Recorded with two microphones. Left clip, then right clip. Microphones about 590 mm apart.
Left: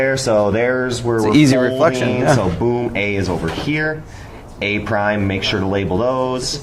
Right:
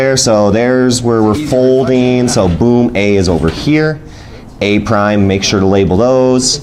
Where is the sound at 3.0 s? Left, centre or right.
Centre.